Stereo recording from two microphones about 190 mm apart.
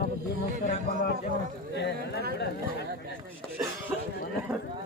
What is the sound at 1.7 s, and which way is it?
Speech, 60° left (ahead or behind).